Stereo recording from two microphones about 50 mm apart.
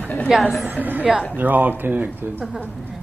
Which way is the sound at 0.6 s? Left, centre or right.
Right.